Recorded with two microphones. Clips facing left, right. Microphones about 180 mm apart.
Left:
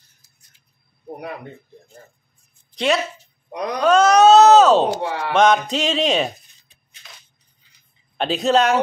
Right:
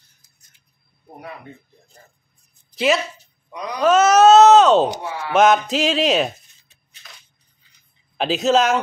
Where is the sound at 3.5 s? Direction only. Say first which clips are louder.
Left 4 dB; 65° left (ahead or behind).